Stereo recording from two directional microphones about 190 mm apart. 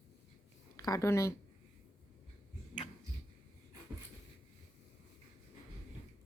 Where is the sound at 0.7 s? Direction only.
15° left (ahead or behind).